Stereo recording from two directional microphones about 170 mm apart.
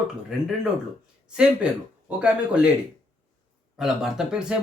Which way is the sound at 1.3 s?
5° right (ahead or behind).